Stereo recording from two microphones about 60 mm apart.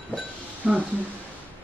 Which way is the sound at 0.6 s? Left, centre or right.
Right.